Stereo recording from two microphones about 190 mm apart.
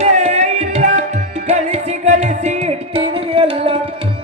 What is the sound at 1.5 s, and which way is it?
Music, 35° right (ahead or behind).